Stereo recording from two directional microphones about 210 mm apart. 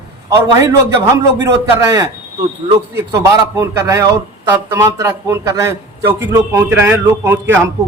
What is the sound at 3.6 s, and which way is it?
A man's voice, 15° right (ahead or behind).